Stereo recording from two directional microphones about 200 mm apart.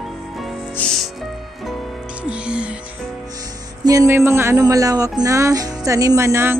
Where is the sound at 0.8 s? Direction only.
10° left (ahead or behind).